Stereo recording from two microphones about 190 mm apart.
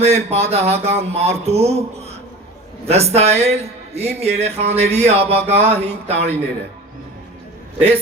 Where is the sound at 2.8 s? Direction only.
35° right (ahead or behind).